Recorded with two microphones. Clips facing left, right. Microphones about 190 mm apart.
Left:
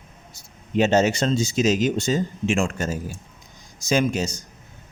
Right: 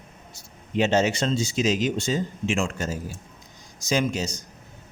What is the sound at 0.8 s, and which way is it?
Speech, 45° left (ahead or behind).